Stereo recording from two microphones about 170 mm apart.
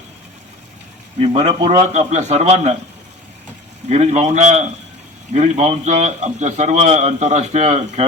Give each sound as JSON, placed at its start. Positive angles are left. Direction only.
{"t": 1.2, "sound": "a man's voice", "side_deg": -40}
{"t": 3.8, "sound": "a man's voice", "side_deg": -40}